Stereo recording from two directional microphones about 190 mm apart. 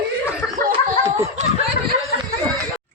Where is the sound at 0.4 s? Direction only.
15° left (ahead or behind).